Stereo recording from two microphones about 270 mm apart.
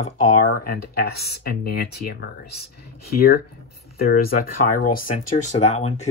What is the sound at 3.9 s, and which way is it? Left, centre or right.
Speech, left.